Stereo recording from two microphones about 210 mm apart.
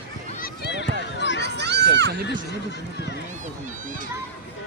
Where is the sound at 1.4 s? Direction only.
55° right (ahead or behind).